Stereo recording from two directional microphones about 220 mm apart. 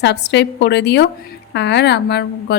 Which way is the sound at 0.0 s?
50° left (ahead or behind).